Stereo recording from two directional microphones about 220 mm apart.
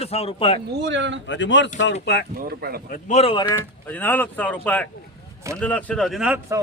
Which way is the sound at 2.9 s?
30° left (ahead or behind).